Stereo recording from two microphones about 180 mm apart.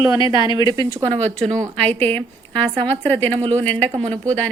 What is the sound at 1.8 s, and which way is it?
A woman's voice, 10° left (ahead or behind).